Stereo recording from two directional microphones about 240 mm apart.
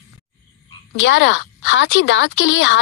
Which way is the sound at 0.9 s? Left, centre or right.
Left.